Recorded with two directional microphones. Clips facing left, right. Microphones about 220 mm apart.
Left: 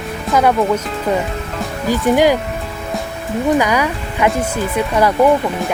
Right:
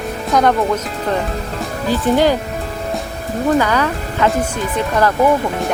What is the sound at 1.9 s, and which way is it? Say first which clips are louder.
Speech: left 1 dB; 10° left (ahead or behind).